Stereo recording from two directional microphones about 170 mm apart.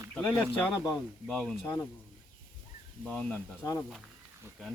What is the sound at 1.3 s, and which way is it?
Speech, centre (ahead or behind).